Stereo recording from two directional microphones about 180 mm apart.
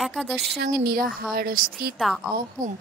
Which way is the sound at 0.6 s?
55° right (ahead or behind).